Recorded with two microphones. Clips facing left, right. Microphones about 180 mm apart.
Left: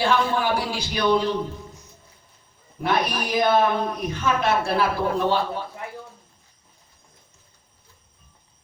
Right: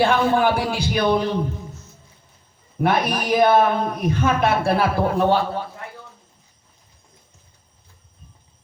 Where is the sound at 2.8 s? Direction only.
55° right (ahead or behind).